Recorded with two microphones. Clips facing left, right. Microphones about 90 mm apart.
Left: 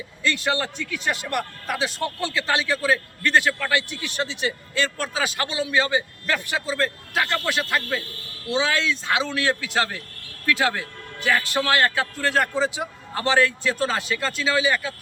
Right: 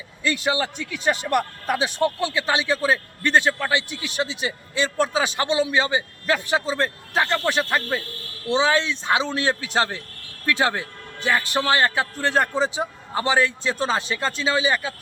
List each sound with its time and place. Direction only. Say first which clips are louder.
0.2 s a man's voice: right 1 dB; 15° right (ahead or behind)
13.1 s a man's voice: even; 15° right (ahead or behind)